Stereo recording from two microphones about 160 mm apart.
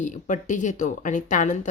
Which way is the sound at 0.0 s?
50° left (ahead or behind).